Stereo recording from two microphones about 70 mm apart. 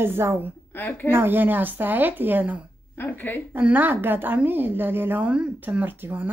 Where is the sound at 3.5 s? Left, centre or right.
Right.